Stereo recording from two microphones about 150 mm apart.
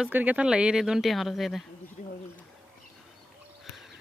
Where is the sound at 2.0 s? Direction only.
60° left (ahead or behind).